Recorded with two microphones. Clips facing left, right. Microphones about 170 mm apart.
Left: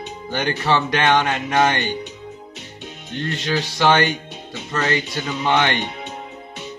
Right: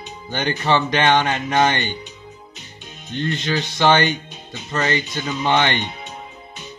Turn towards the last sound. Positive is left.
turn(degrees=5)  # may be behind; listen again after turning